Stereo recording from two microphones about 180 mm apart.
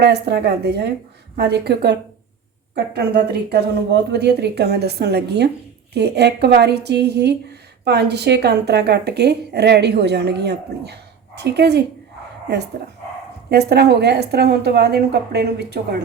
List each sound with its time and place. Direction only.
0.0 s a woman's voice: 65° right (ahead or behind)